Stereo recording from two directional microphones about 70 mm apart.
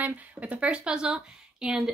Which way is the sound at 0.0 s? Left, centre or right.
Right.